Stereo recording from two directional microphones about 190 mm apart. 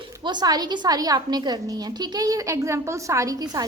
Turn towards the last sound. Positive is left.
turn(degrees=-15)  # may be behind; listen again after turning